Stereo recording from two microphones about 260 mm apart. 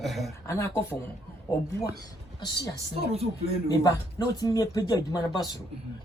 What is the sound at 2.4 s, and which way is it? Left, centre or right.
Speech, centre.